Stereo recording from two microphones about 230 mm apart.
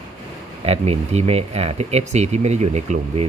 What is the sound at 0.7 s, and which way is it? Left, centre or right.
Speech, right.